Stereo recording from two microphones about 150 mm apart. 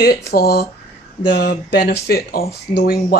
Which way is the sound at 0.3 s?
90° left.